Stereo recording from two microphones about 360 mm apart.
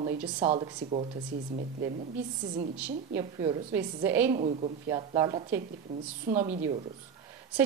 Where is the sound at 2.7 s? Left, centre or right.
Centre.